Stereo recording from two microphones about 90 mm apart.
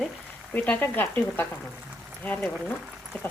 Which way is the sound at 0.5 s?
20° left (ahead or behind).